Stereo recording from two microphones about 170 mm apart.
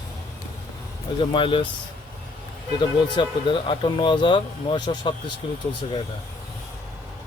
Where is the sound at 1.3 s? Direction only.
30° left (ahead or behind).